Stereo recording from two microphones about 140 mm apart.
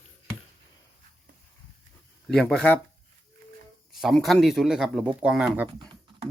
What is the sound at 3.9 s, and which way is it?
Speech, centre (ahead or behind).